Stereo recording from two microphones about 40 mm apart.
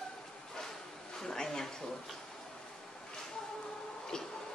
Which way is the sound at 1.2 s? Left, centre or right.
Centre.